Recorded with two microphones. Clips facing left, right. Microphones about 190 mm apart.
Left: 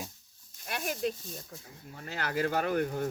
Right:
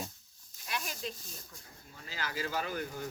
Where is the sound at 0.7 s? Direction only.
55° left (ahead or behind).